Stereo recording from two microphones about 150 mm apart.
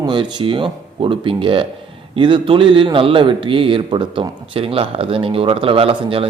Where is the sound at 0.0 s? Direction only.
30° right (ahead or behind).